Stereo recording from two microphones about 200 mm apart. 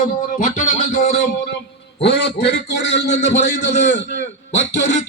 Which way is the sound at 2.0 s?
60° left (ahead or behind).